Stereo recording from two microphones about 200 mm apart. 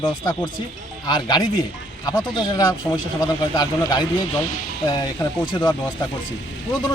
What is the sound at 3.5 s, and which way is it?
Speech, 20° left (ahead or behind).